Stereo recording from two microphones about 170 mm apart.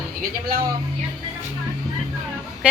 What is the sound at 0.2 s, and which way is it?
Speech, 60° right (ahead or behind).